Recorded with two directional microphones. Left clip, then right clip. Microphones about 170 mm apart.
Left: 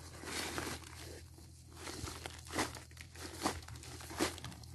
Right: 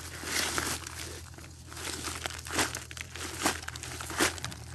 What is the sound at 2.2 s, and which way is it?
Crumpling, 15° left (ahead or behind).